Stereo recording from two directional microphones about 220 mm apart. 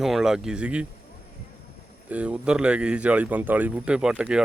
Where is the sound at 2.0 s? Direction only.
5° right (ahead or behind).